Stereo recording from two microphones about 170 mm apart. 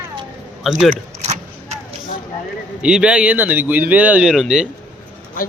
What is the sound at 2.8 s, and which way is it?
Speech, 5° right (ahead or behind).